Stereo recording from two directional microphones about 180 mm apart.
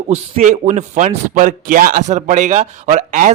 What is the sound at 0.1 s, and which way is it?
Speech, 40° right (ahead or behind).